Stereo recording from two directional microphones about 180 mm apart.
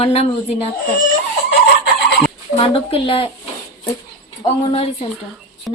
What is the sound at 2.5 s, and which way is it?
Speech, 30° left (ahead or behind).